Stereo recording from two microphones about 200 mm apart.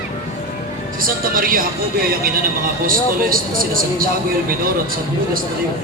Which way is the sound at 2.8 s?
45° right (ahead or behind).